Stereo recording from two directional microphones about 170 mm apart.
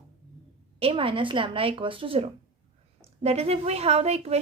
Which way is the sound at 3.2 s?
40° right (ahead or behind).